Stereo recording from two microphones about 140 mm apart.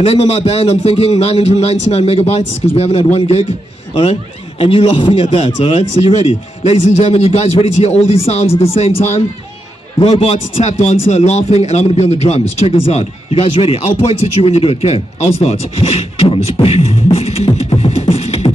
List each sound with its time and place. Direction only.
0.0 s speech: 45° left (ahead or behind)